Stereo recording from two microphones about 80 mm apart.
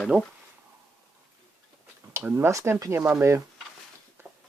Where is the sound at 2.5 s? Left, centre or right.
Right.